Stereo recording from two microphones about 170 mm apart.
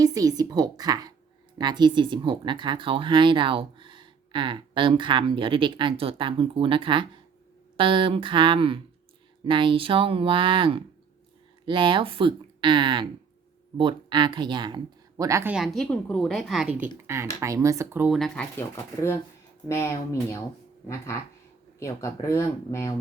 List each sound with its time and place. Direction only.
0.0 s speech: 20° right (ahead or behind)
15.5 s a woman's voice: centre (ahead or behind)
17.4 s speech: 20° right (ahead or behind)
18.1 s a woman's voice: centre (ahead or behind)
18.6 s speech: 15° left (ahead or behind)
21.8 s speech: 15° left (ahead or behind)